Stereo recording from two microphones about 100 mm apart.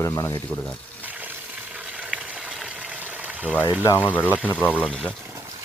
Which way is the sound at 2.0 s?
10° right (ahead or behind).